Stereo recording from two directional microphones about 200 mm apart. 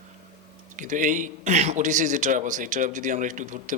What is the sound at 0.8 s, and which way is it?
Speech, 40° right (ahead or behind).